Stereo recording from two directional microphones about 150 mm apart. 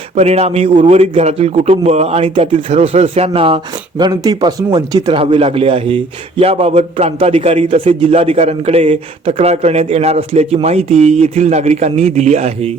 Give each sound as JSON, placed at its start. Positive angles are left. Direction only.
{"t": 0.2, "sound": "a man's voice", "side_deg": -45}